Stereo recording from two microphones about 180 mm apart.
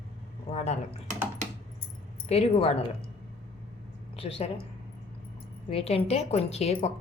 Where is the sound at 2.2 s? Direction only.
35° left (ahead or behind).